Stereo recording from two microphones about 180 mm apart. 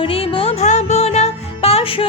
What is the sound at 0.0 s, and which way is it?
Music, 30° left (ahead or behind).